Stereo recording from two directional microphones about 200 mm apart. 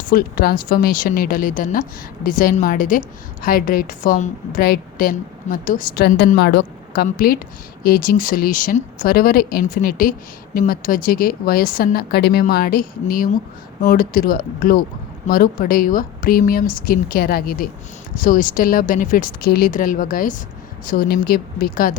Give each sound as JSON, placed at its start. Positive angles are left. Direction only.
{"t": 0.1, "sound": "a woman's voice", "side_deg": 45}